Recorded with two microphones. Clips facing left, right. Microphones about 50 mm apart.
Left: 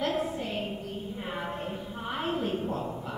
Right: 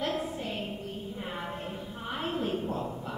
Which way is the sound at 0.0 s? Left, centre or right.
Centre.